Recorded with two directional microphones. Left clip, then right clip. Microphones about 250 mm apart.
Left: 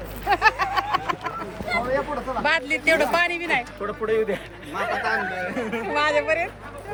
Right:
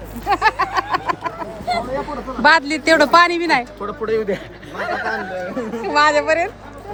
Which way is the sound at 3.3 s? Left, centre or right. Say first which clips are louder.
Right 6 dB; right.